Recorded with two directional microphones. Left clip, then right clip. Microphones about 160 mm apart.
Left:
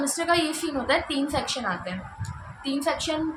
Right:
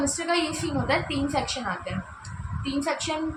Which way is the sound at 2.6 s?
20° left (ahead or behind).